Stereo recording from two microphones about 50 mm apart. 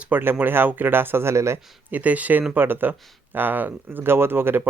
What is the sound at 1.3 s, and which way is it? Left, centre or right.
Speech, right.